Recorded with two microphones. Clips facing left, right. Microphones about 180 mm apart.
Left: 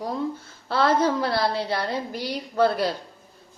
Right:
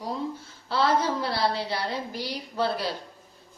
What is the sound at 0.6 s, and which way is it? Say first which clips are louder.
Speech: left 3 dB; 55° left (ahead or behind).